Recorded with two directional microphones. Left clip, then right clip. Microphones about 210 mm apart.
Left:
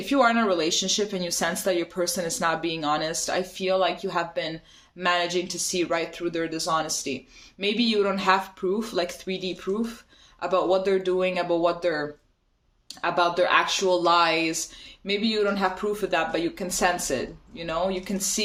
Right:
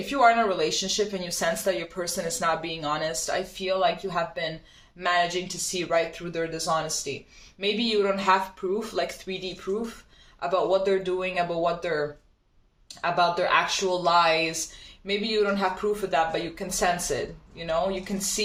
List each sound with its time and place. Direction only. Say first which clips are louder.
0.0 s speech: right 1 dB; 55° left (ahead or behind)
10.5 s speech: left 1 dB; 50° left (ahead or behind)